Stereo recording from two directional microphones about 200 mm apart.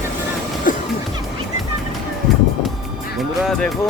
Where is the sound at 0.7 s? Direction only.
40° left (ahead or behind).